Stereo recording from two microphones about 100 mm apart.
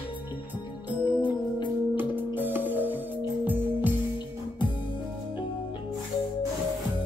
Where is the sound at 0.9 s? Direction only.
50° left (ahead or behind).